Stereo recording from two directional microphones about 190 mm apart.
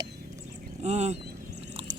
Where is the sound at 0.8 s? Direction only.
35° right (ahead or behind).